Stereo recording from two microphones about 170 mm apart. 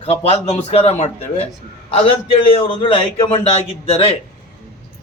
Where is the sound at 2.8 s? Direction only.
30° left (ahead or behind).